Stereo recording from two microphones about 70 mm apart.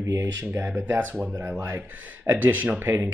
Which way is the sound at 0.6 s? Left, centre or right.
Right.